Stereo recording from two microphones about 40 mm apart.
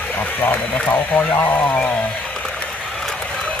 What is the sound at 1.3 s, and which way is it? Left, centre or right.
Speech, left.